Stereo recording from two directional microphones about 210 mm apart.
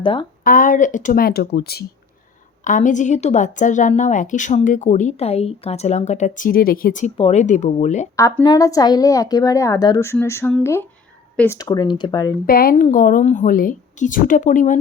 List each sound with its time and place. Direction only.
0.0 s speech: 25° left (ahead or behind)
0.4 s speech: 40° left (ahead or behind)
2.6 s a woman's voice: 35° left (ahead or behind)
8.1 s a woman's voice: 15° left (ahead or behind)
12.5 s a woman's voice: 45° left (ahead or behind)